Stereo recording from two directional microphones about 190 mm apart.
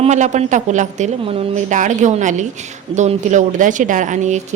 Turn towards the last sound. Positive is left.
turn(degrees=-40)  # may be behind; listen again after turning